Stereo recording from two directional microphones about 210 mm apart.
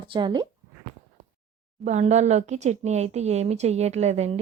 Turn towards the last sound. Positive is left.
turn(degrees=-30)  # may be behind; listen again after turning